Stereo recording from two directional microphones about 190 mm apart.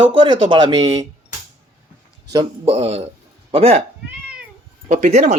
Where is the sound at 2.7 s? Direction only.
30° right (ahead or behind).